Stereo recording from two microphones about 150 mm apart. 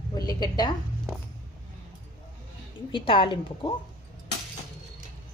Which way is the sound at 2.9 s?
35° left (ahead or behind).